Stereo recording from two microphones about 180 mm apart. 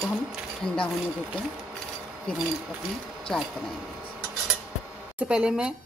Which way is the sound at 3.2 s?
5° left (ahead or behind).